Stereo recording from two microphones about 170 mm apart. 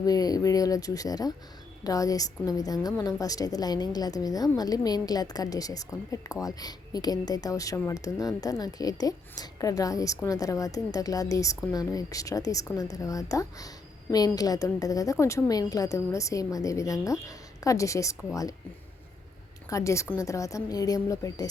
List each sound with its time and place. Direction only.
0.0 s a woman's voice: 20° left (ahead or behind)
19.7 s a woman's voice: 15° left (ahead or behind)